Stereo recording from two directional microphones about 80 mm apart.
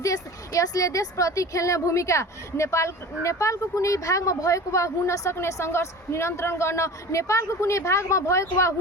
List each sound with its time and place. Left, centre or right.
0.0 s speech: left